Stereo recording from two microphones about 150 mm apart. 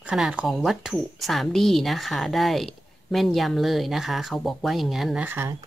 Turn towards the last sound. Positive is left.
turn(degrees=-15)  # may be behind; listen again after turning